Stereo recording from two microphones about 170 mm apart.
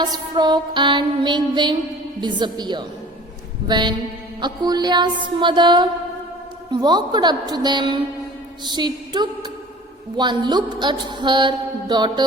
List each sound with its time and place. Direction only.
0.0 s mantra: 25° right (ahead or behind)